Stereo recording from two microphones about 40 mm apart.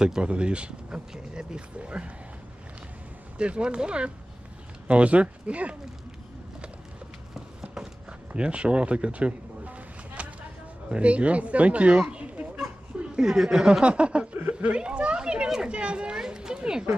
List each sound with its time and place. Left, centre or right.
0.0 s speech: right
3.3 s speech: right
8.3 s a sound: right
10.9 s speech: right
13.1 s speech: centre
15.4 s speech: centre
15.7 s speech: right